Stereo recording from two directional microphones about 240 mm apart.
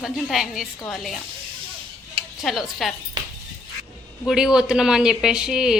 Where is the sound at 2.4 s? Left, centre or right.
Centre.